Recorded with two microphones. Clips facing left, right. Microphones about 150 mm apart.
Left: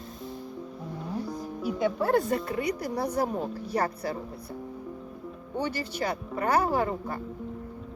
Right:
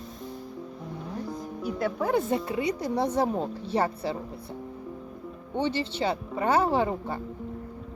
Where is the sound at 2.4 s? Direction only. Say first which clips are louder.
Right 2 dB; 20° right (ahead or behind).